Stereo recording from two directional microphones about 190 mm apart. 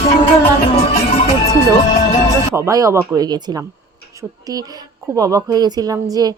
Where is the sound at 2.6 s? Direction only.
15° right (ahead or behind).